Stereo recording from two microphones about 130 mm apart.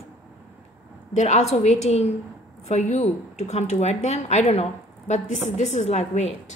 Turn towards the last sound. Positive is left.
turn(degrees=60)  # may be behind; listen again after turning